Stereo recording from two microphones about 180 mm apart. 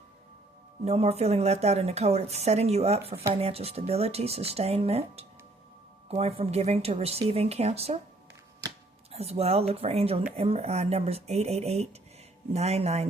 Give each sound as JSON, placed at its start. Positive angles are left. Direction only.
{"t": 0.9, "sound": "speech", "side_deg": -35}
{"t": 9.1, "sound": "speech", "side_deg": -35}